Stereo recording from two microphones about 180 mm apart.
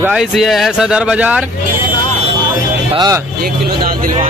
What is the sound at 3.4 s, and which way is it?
Speech, 50° right (ahead or behind).